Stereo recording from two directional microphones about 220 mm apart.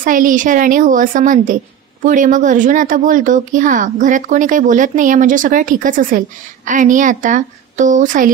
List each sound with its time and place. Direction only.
0.0 s speech: 35° right (ahead or behind)